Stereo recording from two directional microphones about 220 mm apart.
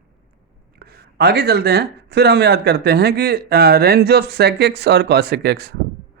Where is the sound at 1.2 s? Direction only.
45° right (ahead or behind).